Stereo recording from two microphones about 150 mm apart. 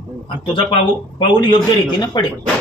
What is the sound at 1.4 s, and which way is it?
Speech, 30° left (ahead or behind).